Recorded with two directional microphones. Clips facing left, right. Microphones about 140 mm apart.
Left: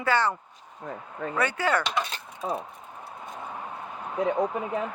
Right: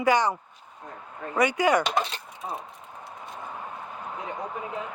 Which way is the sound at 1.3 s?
15° right (ahead or behind).